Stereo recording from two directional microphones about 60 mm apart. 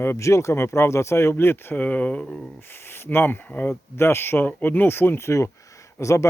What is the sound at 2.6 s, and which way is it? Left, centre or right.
Speech, left.